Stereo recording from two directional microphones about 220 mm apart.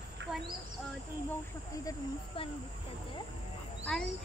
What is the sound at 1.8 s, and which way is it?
Speech, 25° left (ahead or behind).